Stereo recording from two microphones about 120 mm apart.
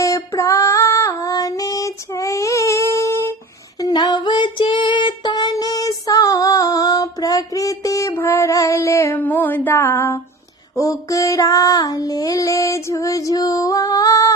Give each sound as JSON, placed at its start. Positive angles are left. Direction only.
{"t": 0.0, "sound": "female singing", "side_deg": 25}
{"t": 3.8, "sound": "child singing", "side_deg": 35}
{"t": 9.2, "sound": "a sound", "side_deg": 15}
{"t": 10.8, "sound": "female singing", "side_deg": 30}